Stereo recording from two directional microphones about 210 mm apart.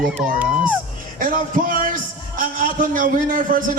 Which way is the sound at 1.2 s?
40° right (ahead or behind).